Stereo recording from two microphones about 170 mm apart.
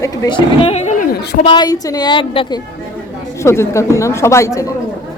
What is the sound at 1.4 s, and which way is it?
A woman's voice, 25° left (ahead or behind).